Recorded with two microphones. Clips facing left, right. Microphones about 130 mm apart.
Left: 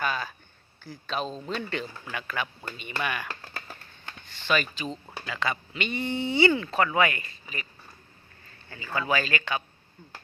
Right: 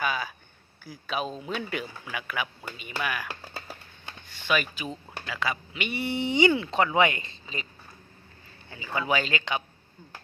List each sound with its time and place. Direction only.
0.0 s a sound: 5° right (ahead or behind)
0.9 s speech: 10° right (ahead or behind)
5.0 s speech: centre (ahead or behind); by 7.7 s 25° right (ahead or behind)
8.7 s speech: 15° right (ahead or behind)